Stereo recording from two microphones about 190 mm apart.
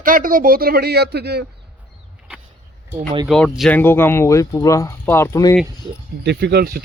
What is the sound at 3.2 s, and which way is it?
Speech, centre (ahead or behind).